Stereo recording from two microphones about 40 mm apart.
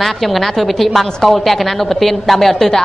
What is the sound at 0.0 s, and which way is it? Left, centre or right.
A woman's voice, centre.